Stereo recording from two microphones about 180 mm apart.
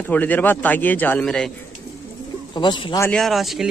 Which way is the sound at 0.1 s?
10° left (ahead or behind).